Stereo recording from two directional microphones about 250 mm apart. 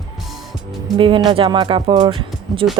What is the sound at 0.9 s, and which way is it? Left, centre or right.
Speech, centre.